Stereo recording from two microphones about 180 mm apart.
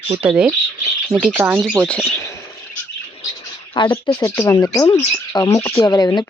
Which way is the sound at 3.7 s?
25° left (ahead or behind).